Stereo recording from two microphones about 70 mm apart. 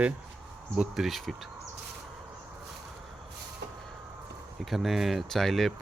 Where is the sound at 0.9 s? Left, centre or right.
Centre.